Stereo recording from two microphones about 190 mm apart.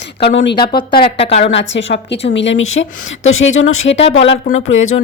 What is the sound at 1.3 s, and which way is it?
A woman's voice, 65° left (ahead or behind).